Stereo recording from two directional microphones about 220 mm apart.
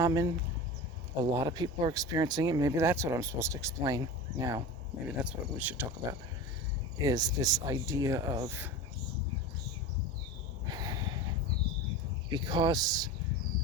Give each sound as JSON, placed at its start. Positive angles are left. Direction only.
{"t": 0.0, "sound": "speech", "side_deg": -15}
{"t": 7.0, "sound": "speech", "side_deg": -15}
{"t": 10.7, "sound": "crow", "side_deg": -15}
{"t": 12.3, "sound": "speech", "side_deg": -20}